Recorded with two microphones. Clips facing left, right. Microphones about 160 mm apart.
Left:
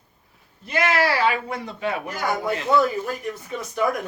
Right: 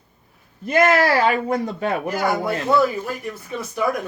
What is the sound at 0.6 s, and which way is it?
A man's voice, 45° right (ahead or behind).